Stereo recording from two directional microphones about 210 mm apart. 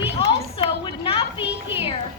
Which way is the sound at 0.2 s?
25° left (ahead or behind).